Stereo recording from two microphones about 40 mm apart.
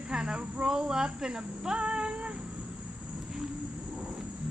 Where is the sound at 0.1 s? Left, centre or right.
Centre.